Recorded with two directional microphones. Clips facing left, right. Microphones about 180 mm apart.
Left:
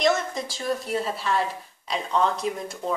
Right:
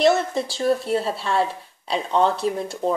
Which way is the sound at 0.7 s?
30° right (ahead or behind).